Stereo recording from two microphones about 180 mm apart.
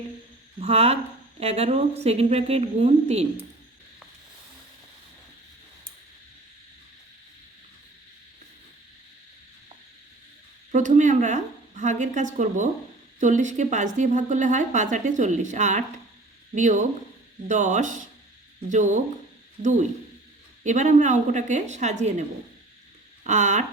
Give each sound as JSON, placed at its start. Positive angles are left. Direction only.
{"t": 0.6, "sound": "a woman's voice", "side_deg": -35}
{"t": 10.7, "sound": "a woman's voice", "side_deg": -45}
{"t": 23.2, "sound": "a woman's voice", "side_deg": -45}